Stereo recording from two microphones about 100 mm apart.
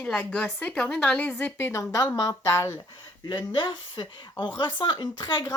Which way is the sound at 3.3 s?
55° left (ahead or behind).